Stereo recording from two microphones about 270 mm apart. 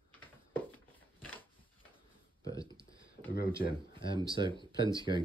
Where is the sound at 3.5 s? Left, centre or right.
Centre.